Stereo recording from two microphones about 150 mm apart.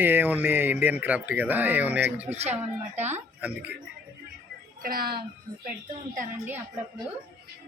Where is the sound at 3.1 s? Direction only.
15° right (ahead or behind).